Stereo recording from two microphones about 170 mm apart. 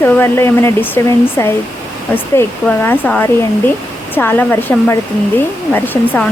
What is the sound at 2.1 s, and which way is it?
Speech, 10° left (ahead or behind).